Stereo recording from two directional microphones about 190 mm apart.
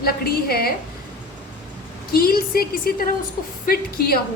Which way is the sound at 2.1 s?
50° left (ahead or behind).